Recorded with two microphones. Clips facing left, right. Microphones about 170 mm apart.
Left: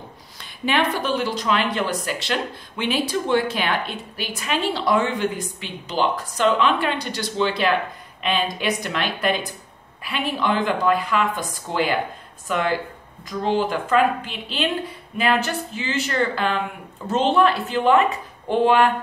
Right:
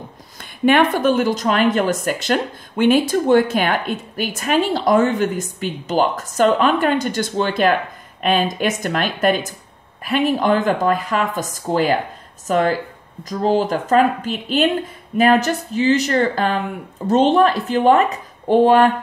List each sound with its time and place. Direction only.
0.4 s a woman's voice: 50° right (ahead or behind)